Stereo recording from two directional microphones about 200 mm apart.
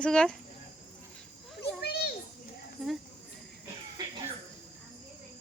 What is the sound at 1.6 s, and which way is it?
Children playing, 55° left (ahead or behind).